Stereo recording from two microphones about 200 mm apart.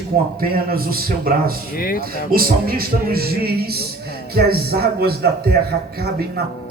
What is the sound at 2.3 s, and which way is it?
A man's voice, 50° right (ahead or behind).